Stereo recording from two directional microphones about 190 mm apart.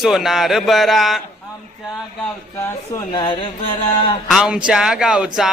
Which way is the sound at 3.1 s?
25° left (ahead or behind).